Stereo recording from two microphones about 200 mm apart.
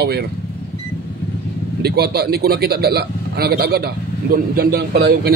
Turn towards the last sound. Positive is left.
turn(degrees=-55)  # may be behind; listen again after turning